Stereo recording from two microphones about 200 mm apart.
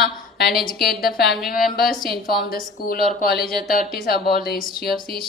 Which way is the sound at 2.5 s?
50° left (ahead or behind).